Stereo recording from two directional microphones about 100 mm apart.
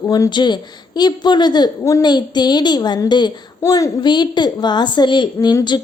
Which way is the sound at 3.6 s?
35° left (ahead or behind).